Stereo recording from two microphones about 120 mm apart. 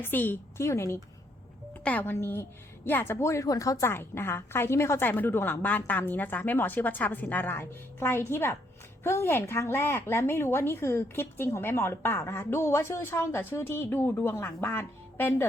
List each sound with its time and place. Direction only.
0.0 s a woman's voice: 15° left (ahead or behind)
1.8 s a woman's voice: 15° left (ahead or behind)